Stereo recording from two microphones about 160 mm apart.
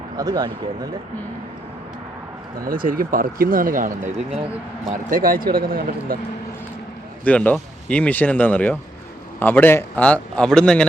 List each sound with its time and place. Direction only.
0.2 s speech: 25° right (ahead or behind)
2.6 s speech: 60° right (ahead or behind)
7.3 s a man's voice: 10° left (ahead or behind)